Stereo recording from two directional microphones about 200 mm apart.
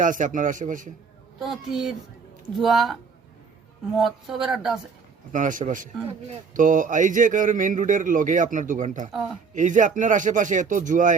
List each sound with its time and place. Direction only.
0.0 s a man's voice: 40° right (ahead or behind)
1.4 s speech: centre (ahead or behind)
5.3 s a man's voice: 40° right (ahead or behind)